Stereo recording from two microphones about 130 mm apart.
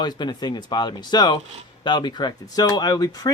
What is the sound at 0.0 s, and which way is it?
Speech, 35° left (ahead or behind).